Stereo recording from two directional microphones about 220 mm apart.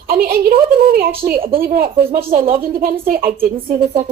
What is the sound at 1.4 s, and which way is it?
Speech, 25° right (ahead or behind).